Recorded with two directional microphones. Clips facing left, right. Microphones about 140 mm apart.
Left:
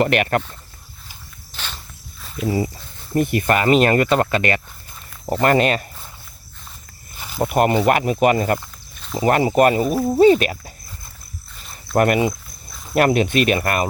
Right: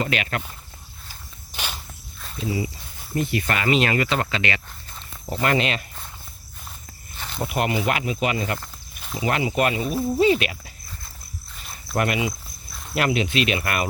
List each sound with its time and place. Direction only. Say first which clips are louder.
0.0 s speech: left 8 dB; 55° left (ahead or behind)
1.5 s walk: right 1 dB; 10° right (ahead or behind)
2.4 s speech: left 5 dB; 30° right (ahead or behind)
3.2 s speech: left 6 dB; 50° left (ahead or behind)
7.2 s snake: left 6 dB; 5° left (ahead or behind)
7.4 s speech: left 7 dB; 45° left (ahead or behind)
11.9 s speech: left 7 dB; 50° left (ahead or behind)